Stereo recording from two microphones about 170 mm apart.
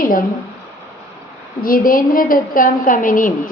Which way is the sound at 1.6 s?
55° left (ahead or behind).